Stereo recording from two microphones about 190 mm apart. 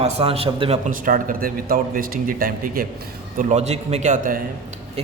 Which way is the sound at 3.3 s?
35° right (ahead or behind).